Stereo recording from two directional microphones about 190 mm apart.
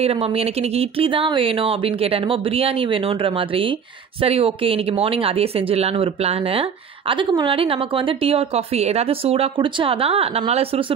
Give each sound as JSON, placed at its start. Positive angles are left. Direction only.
{"t": 0.0, "sound": "speech", "side_deg": -30}